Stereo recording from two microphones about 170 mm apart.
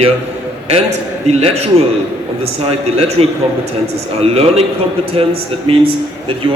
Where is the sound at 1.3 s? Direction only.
40° right (ahead or behind).